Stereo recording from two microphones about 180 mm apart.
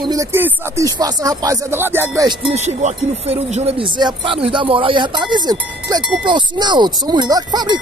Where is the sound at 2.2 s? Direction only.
35° right (ahead or behind).